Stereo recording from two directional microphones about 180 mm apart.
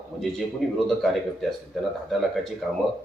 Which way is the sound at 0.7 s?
Centre (ahead or behind).